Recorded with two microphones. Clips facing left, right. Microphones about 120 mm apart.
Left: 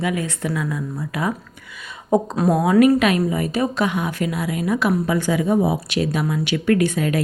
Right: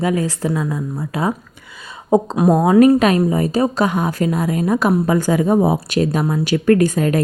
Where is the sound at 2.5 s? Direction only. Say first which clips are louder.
Right 3 dB; 35° right (ahead or behind).